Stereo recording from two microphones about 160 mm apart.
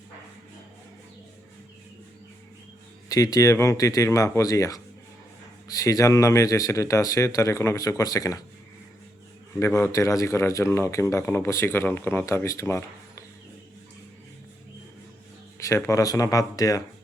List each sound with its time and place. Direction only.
3.1 s speech: 20° left (ahead or behind)
9.6 s speech: 15° left (ahead or behind)
15.5 s speech: 20° left (ahead or behind)